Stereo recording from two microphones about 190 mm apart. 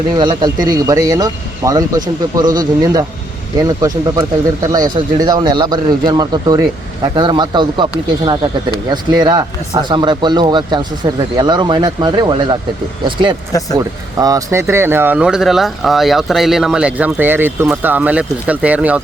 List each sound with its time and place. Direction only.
0.2 s speech: 20° right (ahead or behind)
13.5 s speech: 20° left (ahead or behind)
13.7 s speech: 20° right (ahead or behind)